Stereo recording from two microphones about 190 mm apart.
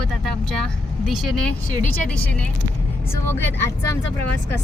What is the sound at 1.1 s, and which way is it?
Speech, centre (ahead or behind).